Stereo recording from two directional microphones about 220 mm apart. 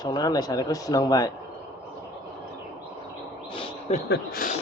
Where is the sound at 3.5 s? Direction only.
25° left (ahead or behind).